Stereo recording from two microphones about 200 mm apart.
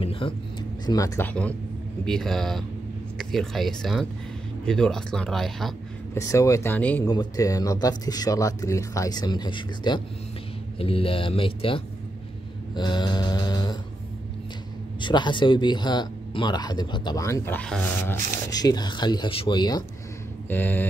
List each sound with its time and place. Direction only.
0.0 s speech: 25° left (ahead or behind)
0.8 s speech: 15° left (ahead or behind); by 5.8 s centre (ahead or behind)
6.1 s speech: 15° left (ahead or behind)
7.1 s speech: 20° left (ahead or behind)
15.0 s speech: 25° left (ahead or behind)
20.4 s a sound: 10° left (ahead or behind)